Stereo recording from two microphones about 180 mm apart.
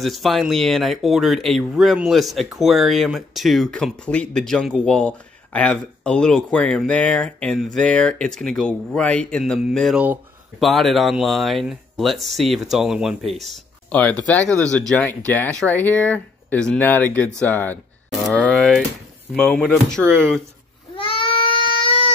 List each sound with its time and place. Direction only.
0.0 s speech: centre (ahead or behind)
20.9 s goat: 30° left (ahead or behind)